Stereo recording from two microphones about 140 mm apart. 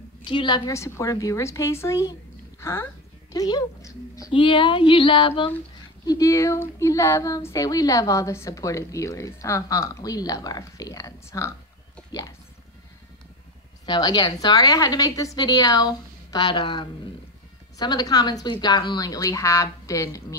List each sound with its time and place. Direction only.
0.2 s speech: 35° left (ahead or behind)
4.3 s speech: 35° left (ahead or behind)
6.0 s speech: 25° left (ahead or behind)
13.8 s speech: 30° left (ahead or behind)